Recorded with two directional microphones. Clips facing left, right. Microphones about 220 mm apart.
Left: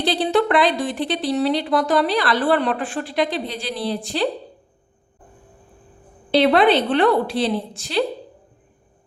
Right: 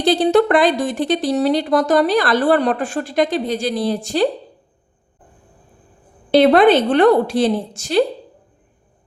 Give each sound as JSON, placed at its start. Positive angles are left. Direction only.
{"t": 0.0, "sound": "speech", "side_deg": -45}
{"t": 6.3, "sound": "speech", "side_deg": -45}